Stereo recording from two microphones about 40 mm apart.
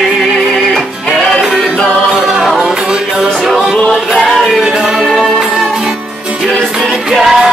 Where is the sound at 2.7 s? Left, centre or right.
Centre.